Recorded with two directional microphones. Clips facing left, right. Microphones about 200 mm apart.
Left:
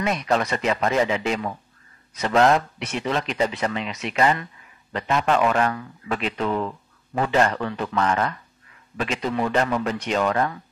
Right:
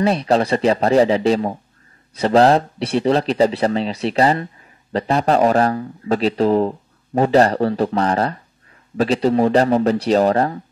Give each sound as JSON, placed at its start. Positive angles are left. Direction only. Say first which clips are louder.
{"t": 0.0, "sound": "speech", "louder": "right 6 dB", "side_deg": -30}